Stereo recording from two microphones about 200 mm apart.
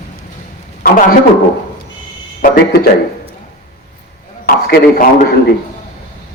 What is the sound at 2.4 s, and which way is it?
Speech, 50° left (ahead or behind).